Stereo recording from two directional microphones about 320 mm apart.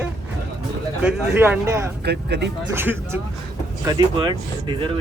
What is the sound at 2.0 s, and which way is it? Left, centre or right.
Speech, right.